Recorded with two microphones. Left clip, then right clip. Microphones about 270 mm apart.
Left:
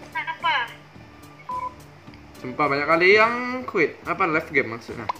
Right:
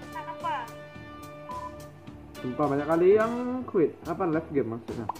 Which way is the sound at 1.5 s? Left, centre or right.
Centre.